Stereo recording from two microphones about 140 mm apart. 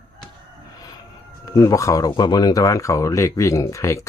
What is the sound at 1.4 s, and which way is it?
Speech, 25° left (ahead or behind).